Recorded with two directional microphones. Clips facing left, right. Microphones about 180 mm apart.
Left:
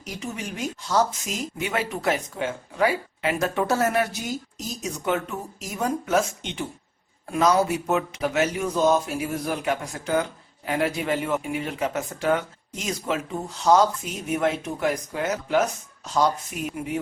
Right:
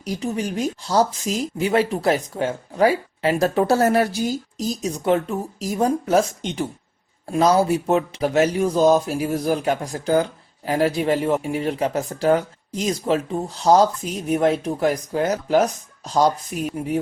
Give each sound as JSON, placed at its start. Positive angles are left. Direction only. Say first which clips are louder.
{"t": 0.0, "sound": "speech", "louder": "right 8 dB", "side_deg": -35}